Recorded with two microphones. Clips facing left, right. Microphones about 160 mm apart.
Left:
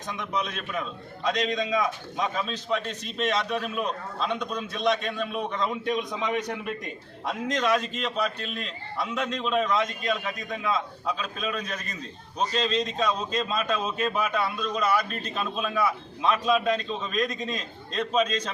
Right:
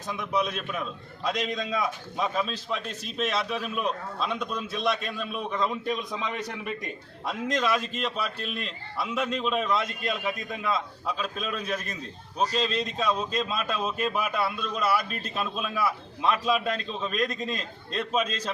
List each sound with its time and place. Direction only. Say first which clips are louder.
0.1 s a man's voice: right 3 dB; 5° right (ahead or behind)